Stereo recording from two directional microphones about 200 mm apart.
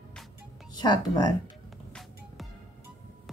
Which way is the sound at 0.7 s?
20° left (ahead or behind).